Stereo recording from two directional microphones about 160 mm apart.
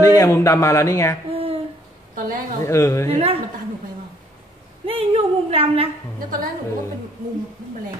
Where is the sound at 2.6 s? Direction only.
20° left (ahead or behind).